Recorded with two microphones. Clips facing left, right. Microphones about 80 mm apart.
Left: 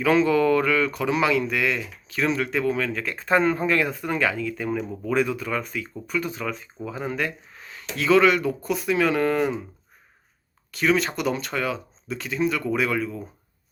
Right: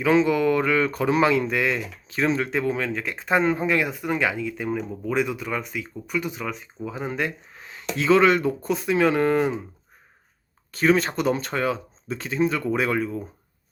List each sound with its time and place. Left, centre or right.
0.0 s speech: right
10.7 s speech: right